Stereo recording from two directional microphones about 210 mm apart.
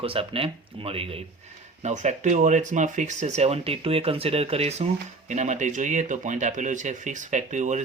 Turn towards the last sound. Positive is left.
turn(degrees=-35)  # may be behind; listen again after turning